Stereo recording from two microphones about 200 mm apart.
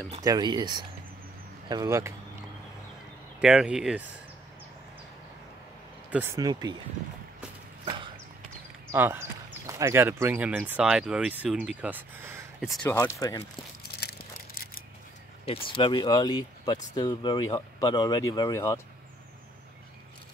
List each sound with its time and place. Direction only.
0.2 s speech: 20° right (ahead or behind)
3.3 s speech: 5° right (ahead or behind)
6.0 s speech: 10° right (ahead or behind)
7.8 s a sound: 25° right (ahead or behind)
8.9 s speech: 10° right (ahead or behind)
12.6 s speech: centre (ahead or behind)
12.9 s speech: 15° left (ahead or behind)
15.4 s speech: 25° left (ahead or behind)